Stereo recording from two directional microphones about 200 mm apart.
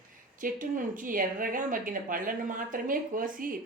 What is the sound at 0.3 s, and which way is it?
Speech, 40° right (ahead or behind).